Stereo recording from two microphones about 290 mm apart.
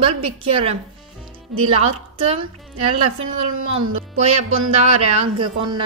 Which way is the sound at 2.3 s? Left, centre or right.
Centre.